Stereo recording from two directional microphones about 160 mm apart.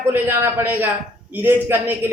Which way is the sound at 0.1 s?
15° right (ahead or behind).